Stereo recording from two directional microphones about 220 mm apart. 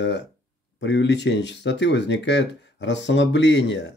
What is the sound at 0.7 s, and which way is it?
Speech, 50° left (ahead or behind).